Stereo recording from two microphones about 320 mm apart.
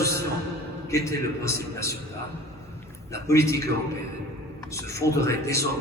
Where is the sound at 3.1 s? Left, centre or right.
Centre.